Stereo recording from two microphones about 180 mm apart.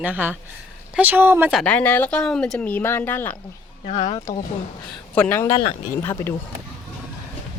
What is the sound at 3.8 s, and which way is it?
Speech, 35° left (ahead or behind).